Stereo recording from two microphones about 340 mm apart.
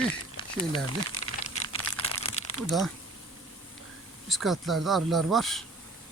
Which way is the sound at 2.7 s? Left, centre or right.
Centre.